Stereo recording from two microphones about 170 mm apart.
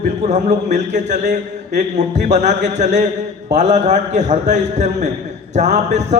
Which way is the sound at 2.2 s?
45° right (ahead or behind).